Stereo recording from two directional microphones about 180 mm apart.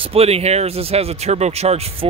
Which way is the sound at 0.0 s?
35° right (ahead or behind).